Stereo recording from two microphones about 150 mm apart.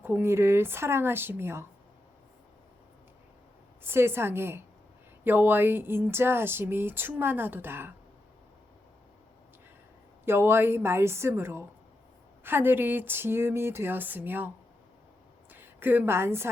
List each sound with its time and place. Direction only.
0.0 s speech: 15° right (ahead or behind)
3.8 s speech: 15° right (ahead or behind)
10.2 s speech: 15° right (ahead or behind)
15.5 s a woman's voice: 15° right (ahead or behind)